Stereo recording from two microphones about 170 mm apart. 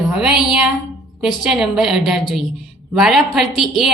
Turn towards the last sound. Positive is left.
turn(degrees=0)  # may be behind; listen again after turning